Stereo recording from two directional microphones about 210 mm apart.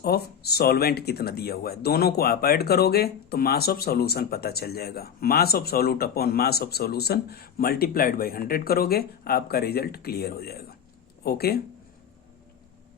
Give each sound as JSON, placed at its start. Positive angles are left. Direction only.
{"t": 0.0, "sound": "speech", "side_deg": 50}